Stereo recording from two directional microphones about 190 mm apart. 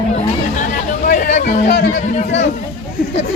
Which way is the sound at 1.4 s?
60° left (ahead or behind).